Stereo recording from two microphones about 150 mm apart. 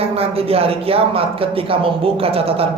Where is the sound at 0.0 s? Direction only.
40° right (ahead or behind).